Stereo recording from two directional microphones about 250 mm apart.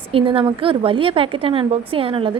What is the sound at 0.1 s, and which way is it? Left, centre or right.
A woman's voice, right.